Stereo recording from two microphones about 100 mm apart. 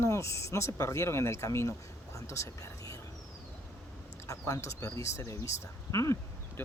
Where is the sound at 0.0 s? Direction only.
30° left (ahead or behind).